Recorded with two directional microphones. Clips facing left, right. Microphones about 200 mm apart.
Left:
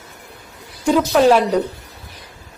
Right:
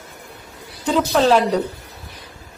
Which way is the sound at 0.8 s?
10° left (ahead or behind).